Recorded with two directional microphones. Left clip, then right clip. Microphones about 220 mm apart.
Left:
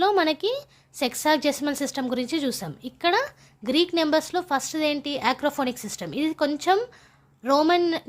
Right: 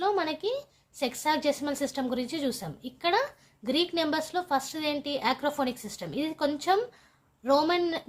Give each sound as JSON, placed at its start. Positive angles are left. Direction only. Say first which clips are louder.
{"t": 0.0, "sound": "a woman's voice", "louder": "left 7 dB", "side_deg": 35}